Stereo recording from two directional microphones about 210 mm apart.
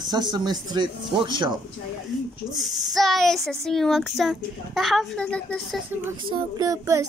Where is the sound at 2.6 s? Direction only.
Centre (ahead or behind).